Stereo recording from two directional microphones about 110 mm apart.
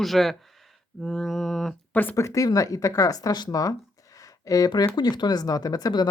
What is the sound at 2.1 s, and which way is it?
Speech, 30° left (ahead or behind).